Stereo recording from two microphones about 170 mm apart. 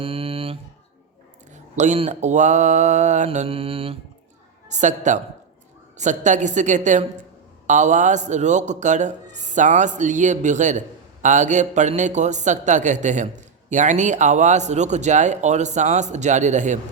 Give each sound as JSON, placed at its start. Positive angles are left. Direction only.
{"t": 0.0, "sound": "a sound", "side_deg": -35}
{"t": 1.7, "sound": "a man's voice", "side_deg": -45}
{"t": 4.7, "sound": "a man's voice", "side_deg": -45}